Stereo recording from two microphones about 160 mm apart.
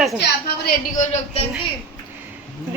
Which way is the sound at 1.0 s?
45° left (ahead or behind).